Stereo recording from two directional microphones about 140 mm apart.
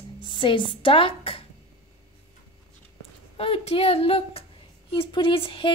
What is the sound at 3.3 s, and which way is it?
A woman's voice, 45° left (ahead or behind).